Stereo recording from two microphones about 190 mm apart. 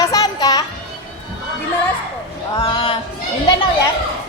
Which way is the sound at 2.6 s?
25° left (ahead or behind).